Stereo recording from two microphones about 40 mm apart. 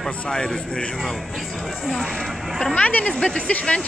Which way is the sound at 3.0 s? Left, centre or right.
Left.